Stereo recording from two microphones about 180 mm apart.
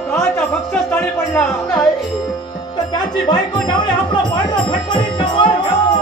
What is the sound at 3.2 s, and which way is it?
Music, 25° left (ahead or behind).